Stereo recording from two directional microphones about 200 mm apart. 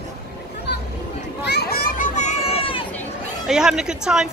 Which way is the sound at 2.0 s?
35° left (ahead or behind).